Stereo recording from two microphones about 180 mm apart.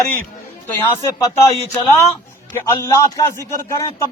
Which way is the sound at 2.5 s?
15° left (ahead or behind).